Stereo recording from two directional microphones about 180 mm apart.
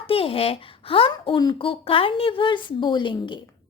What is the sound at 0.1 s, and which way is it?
A woman's voice, 30° left (ahead or behind).